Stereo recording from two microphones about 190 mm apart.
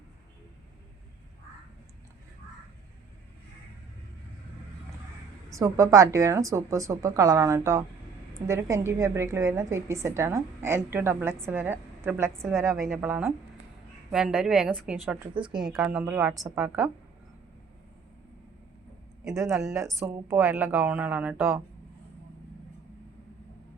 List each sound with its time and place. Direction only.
5.5 s a woman's voice: 15° right (ahead or behind)
19.3 s a woman's voice: 15° right (ahead or behind)